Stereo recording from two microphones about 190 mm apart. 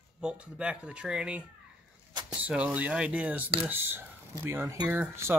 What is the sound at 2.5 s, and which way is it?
Speech, 5° right (ahead or behind).